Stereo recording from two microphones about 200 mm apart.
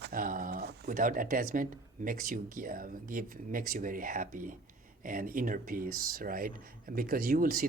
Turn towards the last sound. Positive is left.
turn(degrees=-45)  # may be behind; listen again after turning